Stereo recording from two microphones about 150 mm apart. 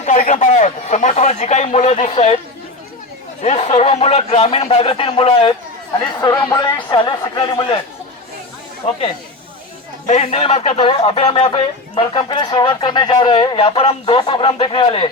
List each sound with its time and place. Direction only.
0.0 s speech: 55° left (ahead or behind)
3.4 s speech: 45° left (ahead or behind)
6.1 s speech: 25° left (ahead or behind)
10.1 s speech: 45° left (ahead or behind)